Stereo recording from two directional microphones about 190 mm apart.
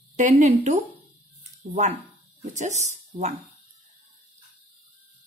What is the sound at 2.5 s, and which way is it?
Speech, 40° right (ahead or behind).